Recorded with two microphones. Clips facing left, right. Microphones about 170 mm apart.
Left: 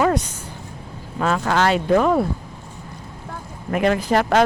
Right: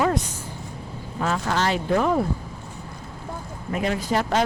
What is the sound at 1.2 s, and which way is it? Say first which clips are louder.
Speech: left 5 dB; 75° left (ahead or behind).